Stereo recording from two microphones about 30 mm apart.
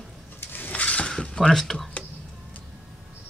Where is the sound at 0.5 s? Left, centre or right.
Left.